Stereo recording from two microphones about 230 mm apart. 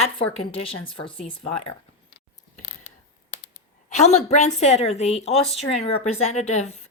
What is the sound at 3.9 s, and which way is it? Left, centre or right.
A woman's voice, left.